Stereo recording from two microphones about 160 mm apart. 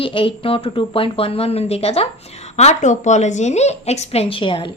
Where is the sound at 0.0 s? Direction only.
35° left (ahead or behind).